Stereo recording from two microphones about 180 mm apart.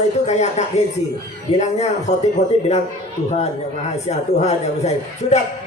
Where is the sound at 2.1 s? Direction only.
40° left (ahead or behind).